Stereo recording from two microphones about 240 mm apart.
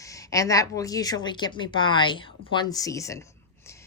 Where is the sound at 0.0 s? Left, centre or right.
Centre.